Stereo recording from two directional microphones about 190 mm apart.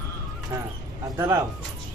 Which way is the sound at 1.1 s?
15° right (ahead or behind).